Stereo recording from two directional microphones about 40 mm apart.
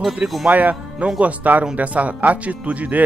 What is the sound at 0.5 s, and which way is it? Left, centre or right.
Speech, right.